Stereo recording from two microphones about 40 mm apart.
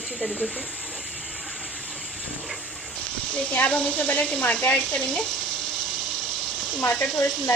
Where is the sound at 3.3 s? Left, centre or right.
Left.